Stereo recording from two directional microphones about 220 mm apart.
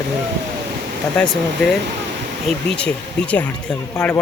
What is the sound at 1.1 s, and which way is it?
Speech, 5° left (ahead or behind).